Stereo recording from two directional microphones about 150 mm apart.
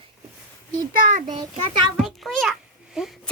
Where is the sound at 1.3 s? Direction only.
30° right (ahead or behind).